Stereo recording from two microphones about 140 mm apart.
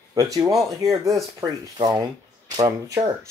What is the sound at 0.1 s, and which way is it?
Speech, 25° right (ahead or behind).